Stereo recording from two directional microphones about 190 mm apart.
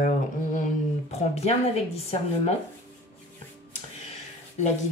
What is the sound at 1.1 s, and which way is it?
Speech, 35° left (ahead or behind).